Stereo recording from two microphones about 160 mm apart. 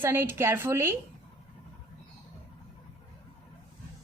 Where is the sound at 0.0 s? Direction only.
15° right (ahead or behind).